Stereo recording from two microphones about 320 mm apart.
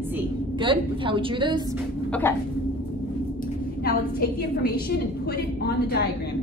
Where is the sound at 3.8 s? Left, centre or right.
Left.